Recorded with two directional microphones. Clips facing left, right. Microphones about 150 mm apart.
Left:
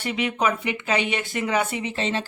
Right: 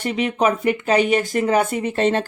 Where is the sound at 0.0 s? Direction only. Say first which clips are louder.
Right 5 dB; 45° right (ahead or behind).